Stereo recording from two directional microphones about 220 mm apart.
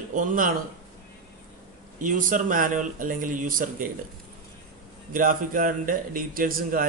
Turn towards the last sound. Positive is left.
turn(degrees=-40)  # may be behind; listen again after turning